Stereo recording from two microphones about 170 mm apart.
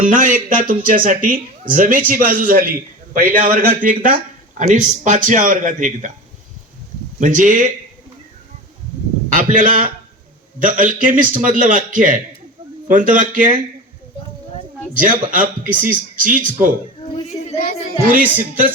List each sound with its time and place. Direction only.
0.0 s a man's voice: 50° right (ahead or behind)
7.2 s a man's voice: 50° right (ahead or behind)
9.3 s a man's voice: 50° right (ahead or behind)
14.9 s a man's voice: 55° right (ahead or behind)
18.0 s a man's voice: 55° right (ahead or behind)